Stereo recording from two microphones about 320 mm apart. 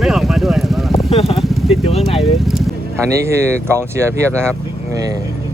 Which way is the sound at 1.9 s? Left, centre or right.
Centre.